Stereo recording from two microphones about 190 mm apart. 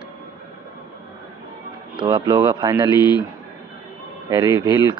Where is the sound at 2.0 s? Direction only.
25° right (ahead or behind).